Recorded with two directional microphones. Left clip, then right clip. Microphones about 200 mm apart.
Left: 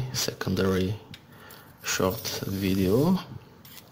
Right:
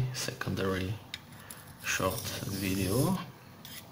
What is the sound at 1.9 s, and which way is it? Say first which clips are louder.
Speech: left 5 dB; 40° left (ahead or behind).